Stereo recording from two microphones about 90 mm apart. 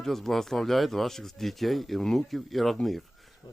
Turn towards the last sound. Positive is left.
turn(degrees=0)  # may be behind; listen again after turning